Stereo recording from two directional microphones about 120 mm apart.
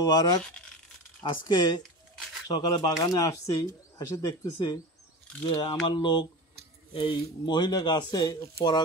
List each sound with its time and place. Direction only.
0.0 s speech: 30° left (ahead or behind)